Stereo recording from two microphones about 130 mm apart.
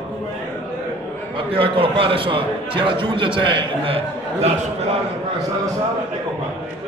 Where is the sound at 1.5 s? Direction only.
45° right (ahead or behind).